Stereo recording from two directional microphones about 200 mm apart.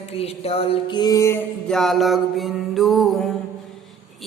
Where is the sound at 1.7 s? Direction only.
Centre (ahead or behind).